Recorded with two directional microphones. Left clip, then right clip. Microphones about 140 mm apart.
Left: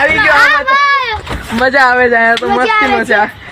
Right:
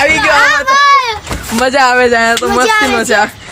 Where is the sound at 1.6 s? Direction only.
5° right (ahead or behind).